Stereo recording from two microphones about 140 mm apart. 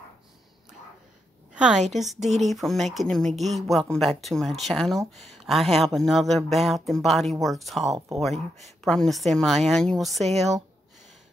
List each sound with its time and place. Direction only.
1.5 s a sound: 5° right (ahead or behind)
2.1 s speech: 55° right (ahead or behind)
2.5 s speech: centre (ahead or behind)